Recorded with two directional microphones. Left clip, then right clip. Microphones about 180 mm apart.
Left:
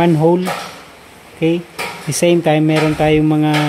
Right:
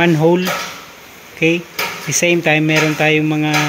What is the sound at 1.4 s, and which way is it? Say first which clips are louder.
Speech: right 2 dB; 15° left (ahead or behind).